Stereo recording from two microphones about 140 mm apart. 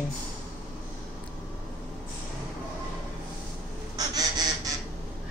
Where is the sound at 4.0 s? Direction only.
25° right (ahead or behind).